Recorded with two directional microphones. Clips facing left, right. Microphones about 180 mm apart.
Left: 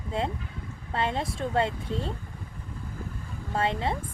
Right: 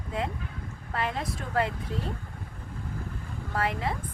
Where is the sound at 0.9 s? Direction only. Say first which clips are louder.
Left 2 dB; 25° left (ahead or behind).